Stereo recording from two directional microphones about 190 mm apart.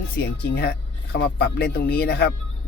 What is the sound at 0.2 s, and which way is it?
Speech, 55° left (ahead or behind).